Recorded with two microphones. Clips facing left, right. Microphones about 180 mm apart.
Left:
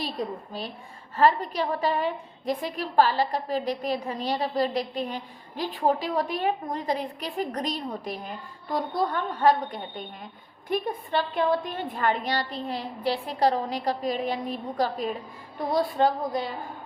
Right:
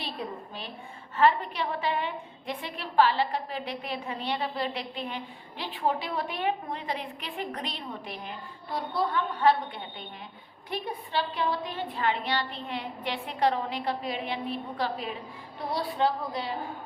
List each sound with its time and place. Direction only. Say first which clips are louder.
1.1 s a woman's voice: left 2 dB; 40° left (ahead or behind)